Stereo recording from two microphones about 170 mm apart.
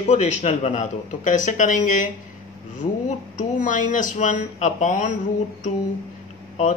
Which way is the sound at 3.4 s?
50° left (ahead or behind).